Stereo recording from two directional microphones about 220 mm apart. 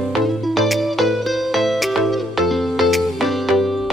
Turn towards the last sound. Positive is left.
turn(degrees=0)  # may be behind; listen again after turning